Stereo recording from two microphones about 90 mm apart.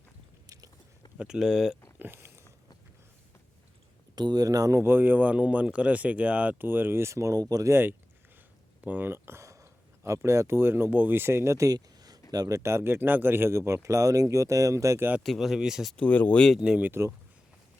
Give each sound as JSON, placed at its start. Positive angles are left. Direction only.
{"t": 0.4, "sound": "biting", "side_deg": -40}
{"t": 1.0, "sound": "a sound", "side_deg": 50}
{"t": 1.4, "sound": "speech", "side_deg": 0}
{"t": 2.0, "sound": "a sound", "side_deg": -25}
{"t": 4.1, "sound": "speech", "side_deg": -50}
{"t": 4.8, "sound": "speech", "side_deg": -25}
{"t": 8.9, "sound": "a sound", "side_deg": -25}
{"t": 10.2, "sound": "speech", "side_deg": -30}
{"t": 15.2, "sound": "speech", "side_deg": 0}
{"t": 16.0, "sound": "speech", "side_deg": 20}
{"t": 16.6, "sound": "speech", "side_deg": -10}